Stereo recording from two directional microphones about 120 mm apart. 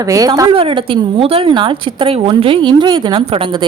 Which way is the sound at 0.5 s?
50° right (ahead or behind).